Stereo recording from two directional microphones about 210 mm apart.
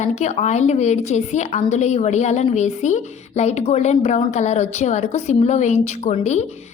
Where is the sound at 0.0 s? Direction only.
35° left (ahead or behind).